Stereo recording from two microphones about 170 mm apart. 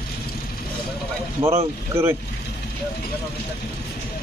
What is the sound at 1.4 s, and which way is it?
Speech, 15° right (ahead or behind).